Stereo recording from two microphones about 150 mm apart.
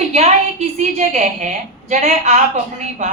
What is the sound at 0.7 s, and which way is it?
A woman's voice, 50° right (ahead or behind).